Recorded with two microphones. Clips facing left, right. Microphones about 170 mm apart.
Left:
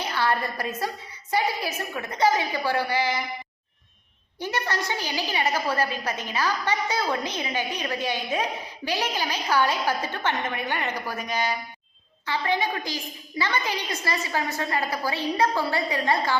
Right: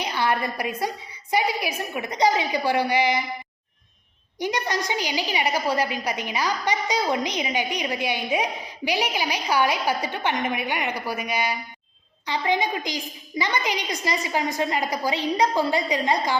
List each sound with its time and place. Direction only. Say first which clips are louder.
0.0 s a woman's voice: right 1 dB; 15° right (ahead or behind)
4.4 s a woman's voice: right 3 dB; 15° right (ahead or behind)